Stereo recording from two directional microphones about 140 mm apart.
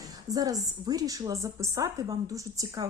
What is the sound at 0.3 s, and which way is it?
A woman's voice, 25° right (ahead or behind).